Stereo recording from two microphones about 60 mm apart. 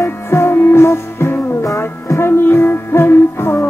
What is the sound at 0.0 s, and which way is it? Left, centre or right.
Music, left.